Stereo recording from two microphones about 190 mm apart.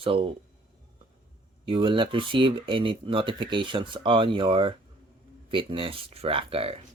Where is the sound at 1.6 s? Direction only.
25° right (ahead or behind).